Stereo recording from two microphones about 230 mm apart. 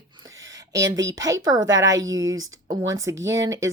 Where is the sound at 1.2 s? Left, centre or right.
Centre.